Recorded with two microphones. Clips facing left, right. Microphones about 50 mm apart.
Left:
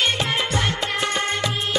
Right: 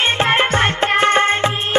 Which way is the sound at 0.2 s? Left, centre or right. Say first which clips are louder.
Right 8 dB; right.